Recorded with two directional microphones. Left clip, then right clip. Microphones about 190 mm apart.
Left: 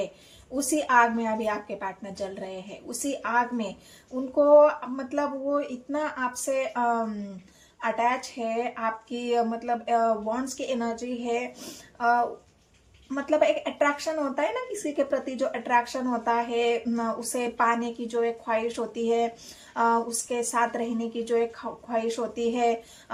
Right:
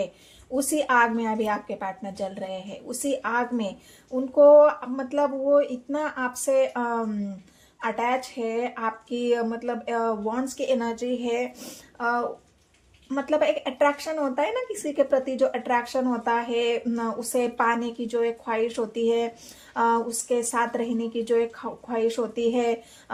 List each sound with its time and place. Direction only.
0.5 s speech: 35° right (ahead or behind)